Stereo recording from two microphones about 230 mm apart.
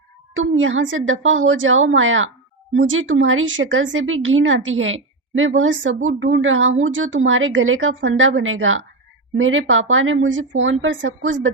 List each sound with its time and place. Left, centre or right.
0.3 s speech: right